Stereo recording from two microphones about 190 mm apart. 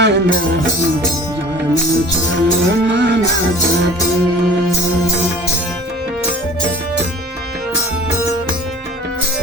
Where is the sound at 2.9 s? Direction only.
65° right (ahead or behind).